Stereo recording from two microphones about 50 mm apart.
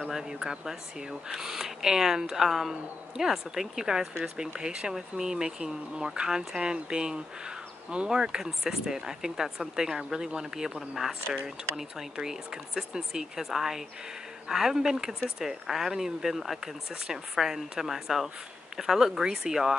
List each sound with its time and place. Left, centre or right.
0.0 s speech: centre